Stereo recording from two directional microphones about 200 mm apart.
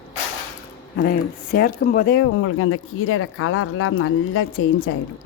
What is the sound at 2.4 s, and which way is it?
Speech, 90° left.